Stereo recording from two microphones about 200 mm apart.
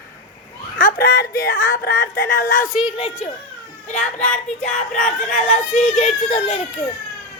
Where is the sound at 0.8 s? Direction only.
50° left (ahead or behind).